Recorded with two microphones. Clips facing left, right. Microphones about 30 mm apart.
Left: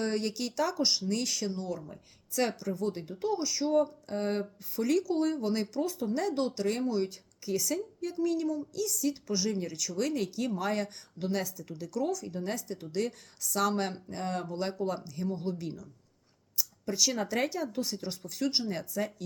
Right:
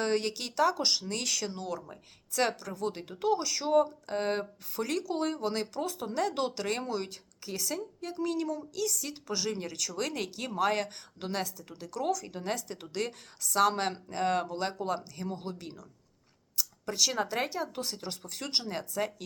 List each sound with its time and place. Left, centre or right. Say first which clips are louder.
0.0 s speech: right 1 dB; right
0.8 s speech: left 1 dB; right
1.3 s speech: even; right
2.6 s speech: left 2 dB; right
6.3 s speech: left 1 dB; right
6.7 s speech: left 3 dB; right
8.4 s speech: left 1 dB; right
9.2 s speech: left 2 dB; right
14.3 s speech: right 5 dB; right
14.5 s speech: even; right
14.8 s speech: even; right
15.1 s speech: left 4 dB; right
17.1 s speech: left 1 dB; right